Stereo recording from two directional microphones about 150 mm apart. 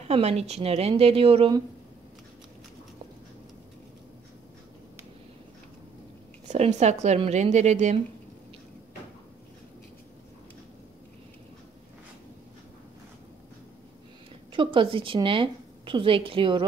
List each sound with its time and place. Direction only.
0.1 s speech: 45° right (ahead or behind)
6.4 s speech: 50° right (ahead or behind)
14.5 s a woman's voice: 35° right (ahead or behind)